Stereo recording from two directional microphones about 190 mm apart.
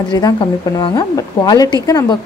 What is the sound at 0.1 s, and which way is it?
A woman's voice, 15° left (ahead or behind).